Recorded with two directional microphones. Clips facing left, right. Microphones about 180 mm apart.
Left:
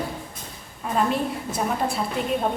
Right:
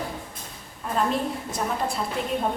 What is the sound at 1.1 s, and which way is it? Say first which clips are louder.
Speech: left 1 dB; 5° left (ahead or behind).